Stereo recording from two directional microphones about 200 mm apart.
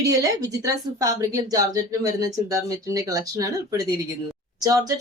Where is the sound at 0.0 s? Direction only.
15° right (ahead or behind).